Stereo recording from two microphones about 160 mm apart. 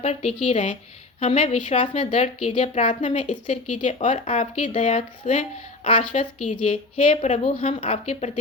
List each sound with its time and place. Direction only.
0.0 s a woman's voice: 45° left (ahead or behind)